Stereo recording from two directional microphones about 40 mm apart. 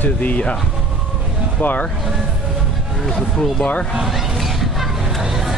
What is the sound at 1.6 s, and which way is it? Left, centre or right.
Speech, left.